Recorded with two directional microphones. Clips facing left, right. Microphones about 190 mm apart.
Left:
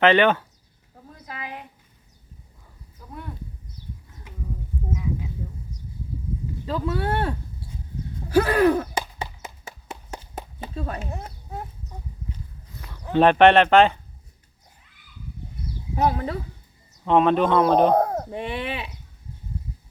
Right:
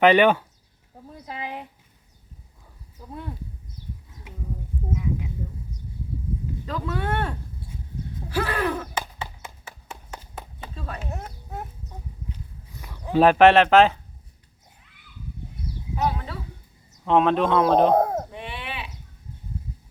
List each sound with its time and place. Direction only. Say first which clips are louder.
0.0 s speech: right 1 dB; 10° right (ahead or behind)
1.3 s a sound: right 3 dB; 30° right (ahead or behind)
6.7 s speech: left 3 dB; 30° left (ahead or behind)
8.3 s a sound: left 8 dB; 40° left (ahead or behind)
12.8 s speech: even; 10° right (ahead or behind)
16.0 s speech: left 4 dB; 45° left (ahead or behind)
17.1 s speech: left 1 dB; centre (ahead or behind)
18.3 s speech: left 7 dB; 40° left (ahead or behind)